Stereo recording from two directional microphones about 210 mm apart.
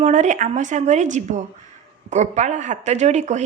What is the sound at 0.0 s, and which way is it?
Speech, 35° right (ahead or behind).